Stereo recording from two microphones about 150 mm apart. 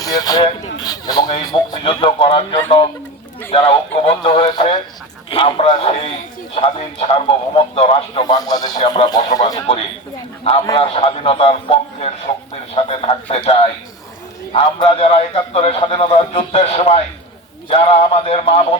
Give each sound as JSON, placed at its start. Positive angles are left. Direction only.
{"t": 0.0, "sound": "a sound", "side_deg": 25}
{"t": 0.8, "sound": "speech", "side_deg": 25}
{"t": 10.8, "sound": "a man's voice", "side_deg": 40}